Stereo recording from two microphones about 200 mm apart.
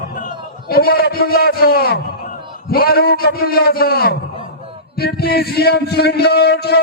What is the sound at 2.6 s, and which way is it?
A man's voice, 50° left (ahead or behind).